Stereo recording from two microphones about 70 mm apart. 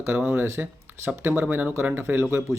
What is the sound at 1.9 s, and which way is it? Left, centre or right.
Speech, right.